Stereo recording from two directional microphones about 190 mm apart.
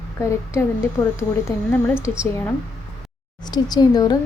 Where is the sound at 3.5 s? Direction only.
20° left (ahead or behind).